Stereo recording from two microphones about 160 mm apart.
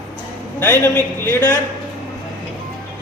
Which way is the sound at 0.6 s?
15° left (ahead or behind).